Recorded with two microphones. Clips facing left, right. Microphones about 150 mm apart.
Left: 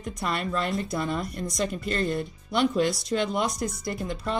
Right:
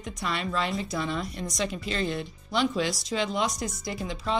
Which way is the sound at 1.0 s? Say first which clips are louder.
Left 2 dB; 50° left (ahead or behind).